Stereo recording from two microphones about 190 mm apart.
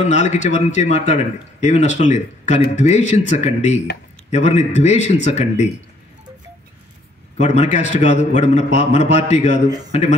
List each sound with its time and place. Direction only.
0.0 s speech: 40° left (ahead or behind)
7.3 s speech: 35° left (ahead or behind)